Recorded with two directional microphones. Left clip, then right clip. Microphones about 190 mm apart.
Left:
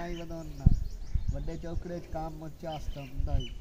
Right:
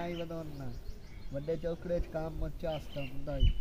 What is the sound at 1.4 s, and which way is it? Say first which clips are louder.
Speech: right 7 dB; 10° right (ahead or behind).